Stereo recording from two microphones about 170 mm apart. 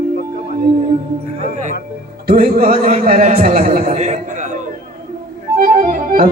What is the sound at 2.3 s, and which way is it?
A man's voice, 65° right (ahead or behind).